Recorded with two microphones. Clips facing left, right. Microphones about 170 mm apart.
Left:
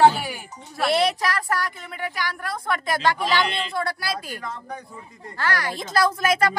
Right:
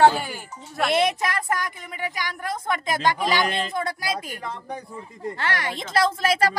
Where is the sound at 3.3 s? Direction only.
45° right (ahead or behind).